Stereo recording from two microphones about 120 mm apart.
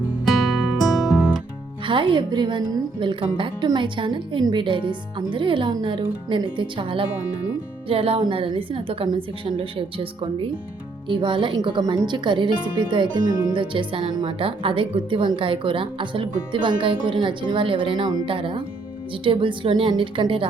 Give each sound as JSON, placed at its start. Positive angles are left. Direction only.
{"t": 0.3, "sound": "music", "side_deg": 0}
{"t": 1.9, "sound": "a woman's voice", "side_deg": -45}
{"t": 13.5, "sound": "a woman's voice", "side_deg": -45}
{"t": 18.3, "sound": "a woman's voice", "side_deg": -50}